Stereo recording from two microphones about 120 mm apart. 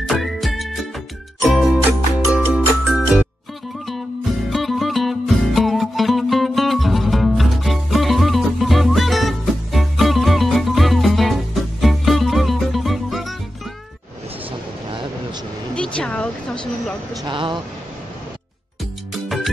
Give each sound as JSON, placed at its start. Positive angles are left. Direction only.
{"t": 0.2, "sound": "music", "side_deg": 0}
{"t": 1.9, "sound": "music", "side_deg": -10}
{"t": 4.5, "sound": "music", "side_deg": 0}
{"t": 15.7, "sound": "a sound", "side_deg": 10}
{"t": 17.1, "sound": "a sound", "side_deg": -35}
{"t": 19.2, "sound": "music", "side_deg": 0}